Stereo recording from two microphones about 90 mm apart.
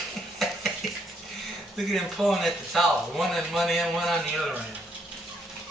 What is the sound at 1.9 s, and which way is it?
A man's voice, centre (ahead or behind).